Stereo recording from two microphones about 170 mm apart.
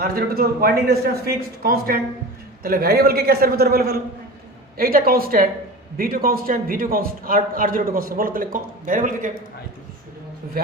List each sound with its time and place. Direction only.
0.0 s a man's voice: 65° right (ahead or behind)